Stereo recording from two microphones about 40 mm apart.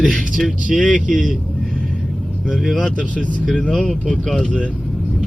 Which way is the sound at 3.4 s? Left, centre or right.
Left.